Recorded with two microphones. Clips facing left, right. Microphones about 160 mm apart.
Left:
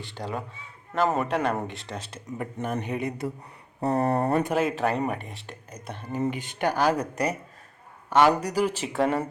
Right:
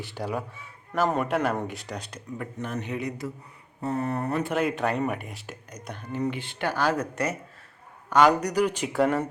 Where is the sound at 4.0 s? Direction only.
35° left (ahead or behind).